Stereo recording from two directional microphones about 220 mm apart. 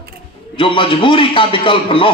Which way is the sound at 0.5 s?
25° left (ahead or behind).